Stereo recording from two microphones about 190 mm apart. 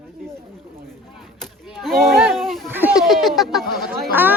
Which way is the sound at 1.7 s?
Centre (ahead or behind).